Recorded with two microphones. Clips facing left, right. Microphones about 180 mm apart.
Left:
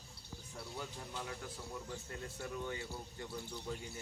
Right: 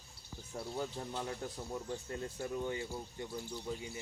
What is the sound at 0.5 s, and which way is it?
Speech, 35° right (ahead or behind).